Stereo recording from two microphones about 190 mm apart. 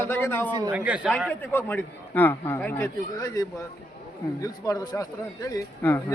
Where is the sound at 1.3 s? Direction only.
10° left (ahead or behind).